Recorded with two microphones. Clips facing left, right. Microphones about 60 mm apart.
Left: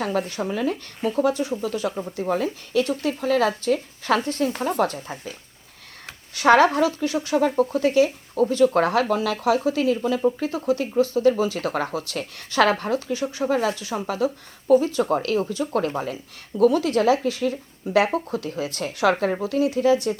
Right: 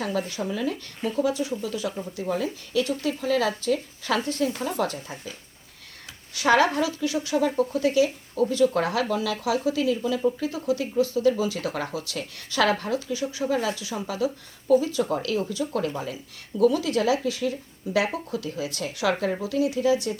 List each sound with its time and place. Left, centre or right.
0.0 s speech: left
6.1 s a sound: left
6.7 s speech: left